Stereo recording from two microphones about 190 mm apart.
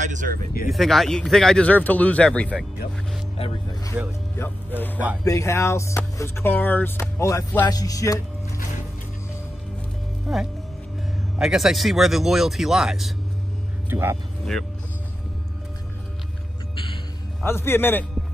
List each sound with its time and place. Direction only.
0.0 s speech: 40° right (ahead or behind)
0.7 s speech: centre (ahead or behind)
4.4 s speech: 10° left (ahead or behind)
10.3 s speech: centre (ahead or behind)
13.8 s speech: 10° right (ahead or behind)
16.7 s music: 30° left (ahead or behind)
17.4 s speech: 10° left (ahead or behind)